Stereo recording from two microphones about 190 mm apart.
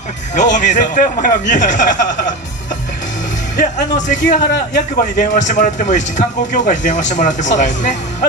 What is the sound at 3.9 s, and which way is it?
Speech, 40° left (ahead or behind).